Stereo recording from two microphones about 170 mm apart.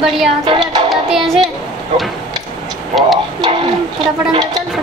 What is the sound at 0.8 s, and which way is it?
Child singing, centre (ahead or behind).